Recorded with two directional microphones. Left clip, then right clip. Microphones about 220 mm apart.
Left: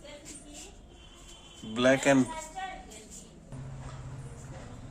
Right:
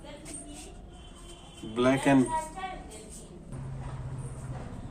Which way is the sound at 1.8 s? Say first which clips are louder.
Left 1 dB; 50° left (ahead or behind).